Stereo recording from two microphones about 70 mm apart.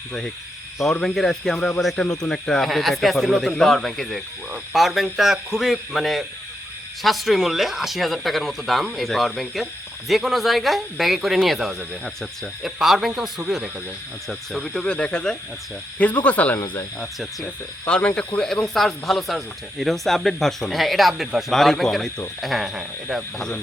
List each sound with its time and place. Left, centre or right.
1.0 s speech: centre
14.8 s speech: centre
18.3 s speech: centre